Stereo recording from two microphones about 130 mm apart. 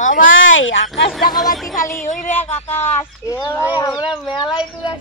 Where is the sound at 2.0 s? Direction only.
80° left.